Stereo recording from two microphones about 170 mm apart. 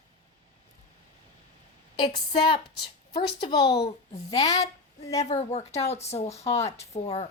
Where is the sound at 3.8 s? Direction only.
20° left (ahead or behind).